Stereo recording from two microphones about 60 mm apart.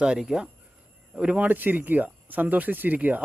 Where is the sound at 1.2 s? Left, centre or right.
Right.